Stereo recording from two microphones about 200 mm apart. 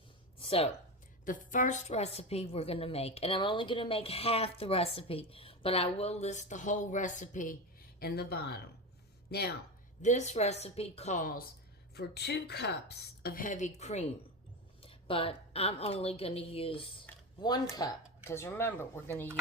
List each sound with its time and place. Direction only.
0.3 s a sound: 30° left (ahead or behind)
1.2 s a woman's voice: 40° left (ahead or behind)
7.9 s a woman's voice: 50° left (ahead or behind)
10.0 s speech: 35° left (ahead or behind)
11.9 s a woman's voice: 55° left (ahead or behind); by 16.8 s 30° left (ahead or behind)
17.1 s a sound: 5° left (ahead or behind)
17.7 s speech: 15° left (ahead or behind)